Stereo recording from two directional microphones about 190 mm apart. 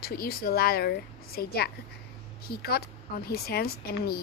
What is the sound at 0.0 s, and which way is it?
Speech, 50° left (ahead or behind).